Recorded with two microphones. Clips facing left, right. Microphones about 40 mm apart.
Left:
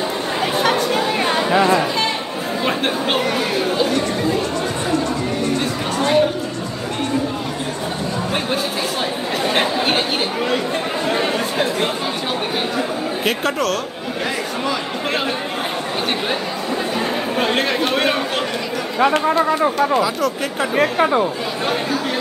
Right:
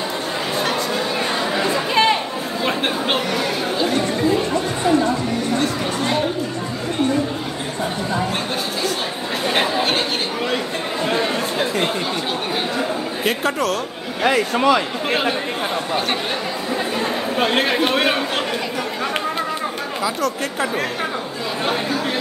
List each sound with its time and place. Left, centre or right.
3.3 s chatter: centre
5.6 s chatter: centre
9.5 s chatter: centre
13.2 s a sound: centre
14.2 s a man's voice: right
17.4 s speech: centre